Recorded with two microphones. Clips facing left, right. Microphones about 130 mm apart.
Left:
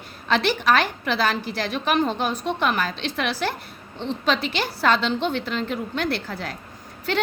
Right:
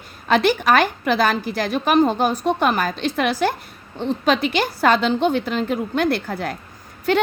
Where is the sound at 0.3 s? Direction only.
50° right (ahead or behind).